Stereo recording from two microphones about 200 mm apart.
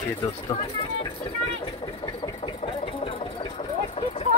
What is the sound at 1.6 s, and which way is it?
Engine, 25° left (ahead or behind).